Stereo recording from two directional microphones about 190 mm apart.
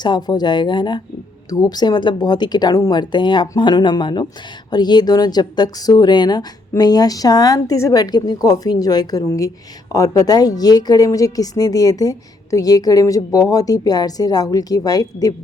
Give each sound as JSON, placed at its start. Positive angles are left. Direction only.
{"t": 0.0, "sound": "a woman's voice", "side_deg": 20}